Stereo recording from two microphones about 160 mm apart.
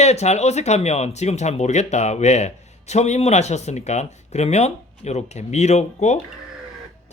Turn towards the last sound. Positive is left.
turn(degrees=45)  # may be behind; listen again after turning